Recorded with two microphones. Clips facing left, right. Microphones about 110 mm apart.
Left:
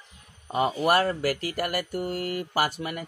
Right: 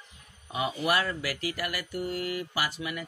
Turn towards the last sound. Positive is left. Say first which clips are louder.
# left 5 dB
turn(degrees=45)  # may be behind; listen again after turning